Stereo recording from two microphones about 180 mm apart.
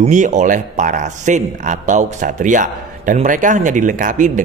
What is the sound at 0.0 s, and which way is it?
Speech, 45° right (ahead or behind).